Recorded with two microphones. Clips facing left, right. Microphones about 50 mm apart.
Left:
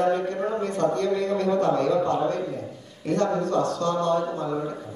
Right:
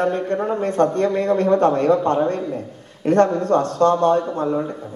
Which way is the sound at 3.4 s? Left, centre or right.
Right.